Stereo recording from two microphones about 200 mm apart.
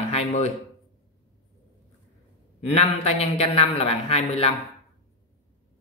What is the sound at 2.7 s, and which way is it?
A man's voice, 30° left (ahead or behind).